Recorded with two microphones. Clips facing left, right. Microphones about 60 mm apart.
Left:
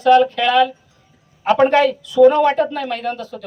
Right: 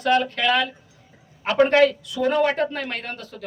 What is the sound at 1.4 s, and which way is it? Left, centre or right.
A woman's voice, left.